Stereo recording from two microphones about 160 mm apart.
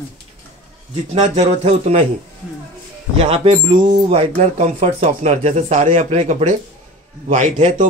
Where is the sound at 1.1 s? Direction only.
45° right (ahead or behind).